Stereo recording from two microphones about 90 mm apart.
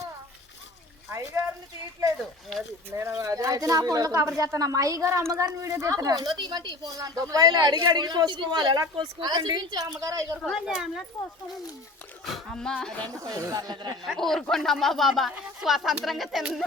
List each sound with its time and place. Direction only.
1.1 s a sound: 30° right (ahead or behind)
2.9 s a woman's voice: 30° right (ahead or behind); by 6.9 s 55° right (ahead or behind)
7.0 s a woman's voice: 40° right (ahead or behind)
10.5 s speech: 5° right (ahead or behind)
12.2 s speech: 5° left (ahead or behind)
13.1 s a woman's voice: 45° right (ahead or behind)
14.0 s speech: centre (ahead or behind)